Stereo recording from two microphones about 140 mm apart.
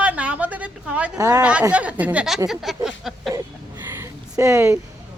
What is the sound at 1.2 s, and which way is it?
Speech, 25° right (ahead or behind).